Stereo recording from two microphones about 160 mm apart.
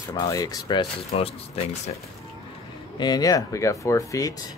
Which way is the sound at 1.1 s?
40° left (ahead or behind).